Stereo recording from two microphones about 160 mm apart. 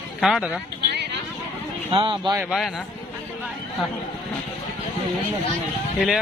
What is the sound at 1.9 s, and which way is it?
Speech, 35° right (ahead or behind).